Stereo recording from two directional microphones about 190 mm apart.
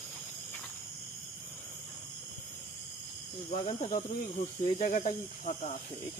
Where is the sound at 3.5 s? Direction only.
35° left (ahead or behind).